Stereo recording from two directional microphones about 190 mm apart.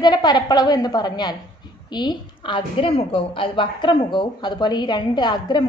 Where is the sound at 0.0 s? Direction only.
20° left (ahead or behind).